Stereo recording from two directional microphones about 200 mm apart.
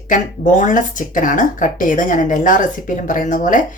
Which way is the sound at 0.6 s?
40° left (ahead or behind).